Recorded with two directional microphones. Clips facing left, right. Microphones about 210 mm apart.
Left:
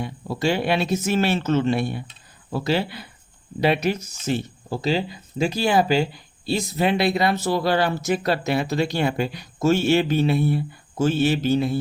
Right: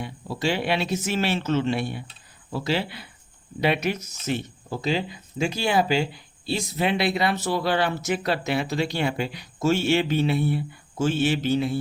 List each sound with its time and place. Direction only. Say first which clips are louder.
0.0 s speech: left 3 dB; 45° left (ahead or behind)